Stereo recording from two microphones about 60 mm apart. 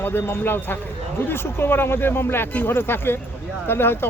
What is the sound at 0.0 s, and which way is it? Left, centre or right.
Speech, left.